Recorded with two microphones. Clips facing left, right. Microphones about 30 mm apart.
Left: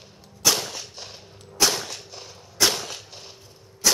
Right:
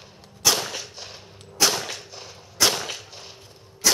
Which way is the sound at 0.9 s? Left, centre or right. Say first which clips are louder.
Right 1 dB; centre.